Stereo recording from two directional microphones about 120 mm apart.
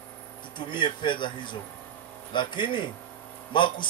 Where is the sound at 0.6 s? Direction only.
40° left (ahead or behind).